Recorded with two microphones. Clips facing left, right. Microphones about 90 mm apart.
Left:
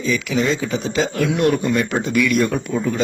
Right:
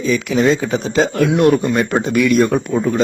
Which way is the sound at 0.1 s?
40° right (ahead or behind).